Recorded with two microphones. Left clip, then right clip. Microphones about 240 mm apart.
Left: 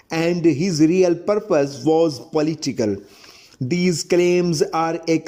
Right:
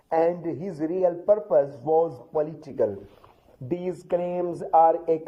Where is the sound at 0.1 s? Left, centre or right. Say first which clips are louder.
Left 4 dB; left.